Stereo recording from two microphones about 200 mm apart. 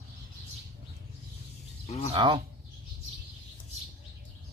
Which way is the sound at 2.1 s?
25° right (ahead or behind).